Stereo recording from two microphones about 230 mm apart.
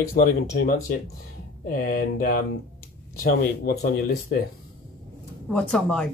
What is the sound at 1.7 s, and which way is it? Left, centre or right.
Speech, left.